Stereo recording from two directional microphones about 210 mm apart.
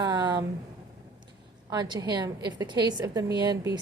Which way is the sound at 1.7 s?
20° right (ahead or behind).